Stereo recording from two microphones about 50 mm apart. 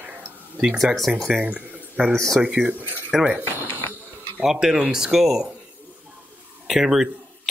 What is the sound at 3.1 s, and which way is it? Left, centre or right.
Frying, centre.